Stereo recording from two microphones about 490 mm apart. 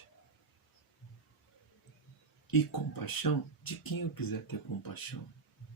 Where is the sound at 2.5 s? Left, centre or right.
Left.